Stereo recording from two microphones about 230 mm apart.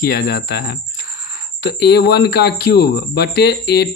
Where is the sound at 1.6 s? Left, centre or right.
Left.